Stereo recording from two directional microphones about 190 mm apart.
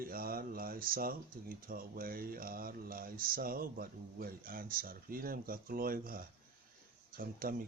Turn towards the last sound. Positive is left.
turn(degrees=-50)  # may be behind; listen again after turning